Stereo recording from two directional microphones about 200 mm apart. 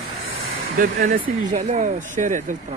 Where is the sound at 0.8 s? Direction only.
40° right (ahead or behind).